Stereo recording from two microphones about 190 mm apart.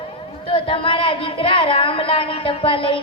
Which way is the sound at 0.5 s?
30° left (ahead or behind).